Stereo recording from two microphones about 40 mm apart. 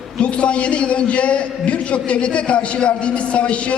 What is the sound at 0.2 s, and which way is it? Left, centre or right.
A man's voice, left.